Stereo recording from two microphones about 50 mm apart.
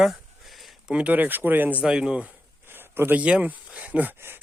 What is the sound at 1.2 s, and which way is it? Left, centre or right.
Speech, right.